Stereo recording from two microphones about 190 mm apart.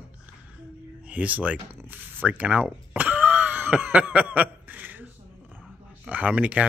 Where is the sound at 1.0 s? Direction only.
5° right (ahead or behind).